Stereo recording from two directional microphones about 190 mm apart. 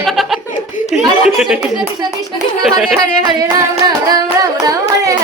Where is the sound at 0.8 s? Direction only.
45° left (ahead or behind).